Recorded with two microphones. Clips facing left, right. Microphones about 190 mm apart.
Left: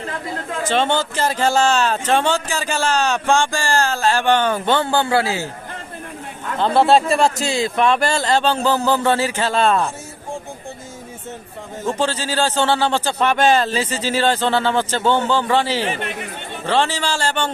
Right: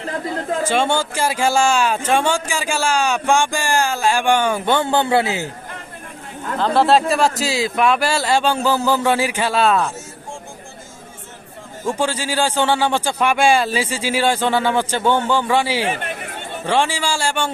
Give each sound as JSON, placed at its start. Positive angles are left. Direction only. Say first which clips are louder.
{"t": 0.7, "sound": "speech", "louder": "left 3 dB", "side_deg": -10}
{"t": 6.6, "sound": "speech", "louder": "left 1 dB", "side_deg": 0}
{"t": 11.9, "sound": "speech", "louder": "even", "side_deg": -10}
{"t": 15.9, "sound": "speech", "louder": "right 1 dB", "side_deg": -50}
{"t": 16.6, "sound": "speech", "louder": "even", "side_deg": -10}